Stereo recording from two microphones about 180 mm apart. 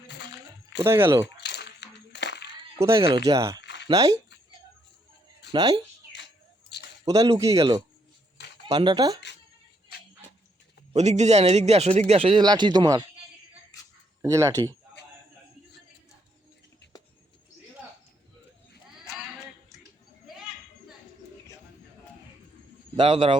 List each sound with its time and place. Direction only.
0.1 s a sound: 75° left (ahead or behind)
0.8 s speech: 15° right (ahead or behind)
1.4 s a sound: 70° left (ahead or behind)
3.2 s speech: 20° right (ahead or behind)
3.6 s a sound: 75° left (ahead or behind)
3.8 s speech: 20° right (ahead or behind)
5.5 s speech: 20° right (ahead or behind)
6.1 s bird: 70° left (ahead or behind)
7.0 s speech: 20° right (ahead or behind)
10.9 s a man's voice: 40° right (ahead or behind); by 13.1 s 25° right (ahead or behind)
14.2 s speech: 15° right (ahead or behind)
23.0 s speech: 30° right (ahead or behind)